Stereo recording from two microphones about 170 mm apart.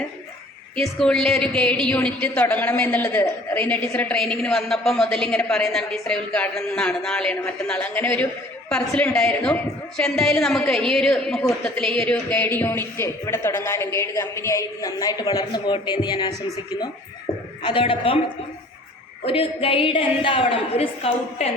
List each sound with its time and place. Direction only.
0.8 s a woman's voice: centre (ahead or behind); by 16.3 s 25° left (ahead or behind)
17.6 s a woman's voice: 30° left (ahead or behind)
19.2 s a woman's voice: 35° left (ahead or behind)